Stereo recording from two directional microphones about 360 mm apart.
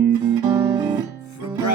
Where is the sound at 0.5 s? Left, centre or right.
Centre.